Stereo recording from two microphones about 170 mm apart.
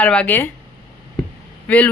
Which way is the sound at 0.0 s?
10° left (ahead or behind).